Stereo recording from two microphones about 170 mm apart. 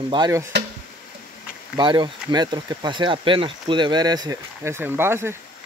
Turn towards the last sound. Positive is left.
turn(degrees=-15)  # may be behind; listen again after turning